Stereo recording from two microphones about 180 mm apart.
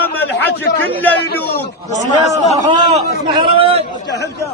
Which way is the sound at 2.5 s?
30° right (ahead or behind).